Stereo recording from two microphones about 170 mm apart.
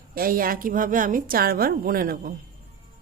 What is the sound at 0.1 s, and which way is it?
Speech, 60° right (ahead or behind).